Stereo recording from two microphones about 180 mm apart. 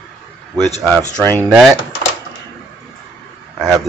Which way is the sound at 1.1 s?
5° left (ahead or behind).